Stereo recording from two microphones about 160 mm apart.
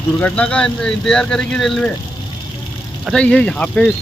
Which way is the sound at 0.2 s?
5° left (ahead or behind).